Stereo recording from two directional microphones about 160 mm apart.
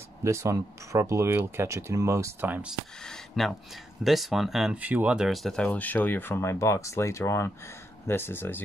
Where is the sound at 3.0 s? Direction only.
5° left (ahead or behind).